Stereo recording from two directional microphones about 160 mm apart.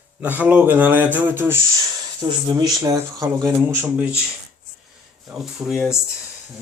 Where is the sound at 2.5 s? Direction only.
25° right (ahead or behind).